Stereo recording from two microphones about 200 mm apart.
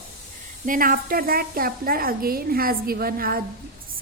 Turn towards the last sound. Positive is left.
turn(degrees=-45)  # may be behind; listen again after turning